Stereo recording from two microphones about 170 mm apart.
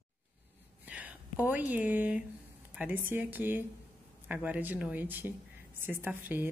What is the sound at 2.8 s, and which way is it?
A woman's voice, 10° right (ahead or behind).